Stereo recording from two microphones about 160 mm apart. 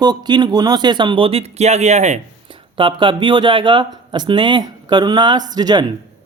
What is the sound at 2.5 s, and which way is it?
Speech, 30° right (ahead or behind).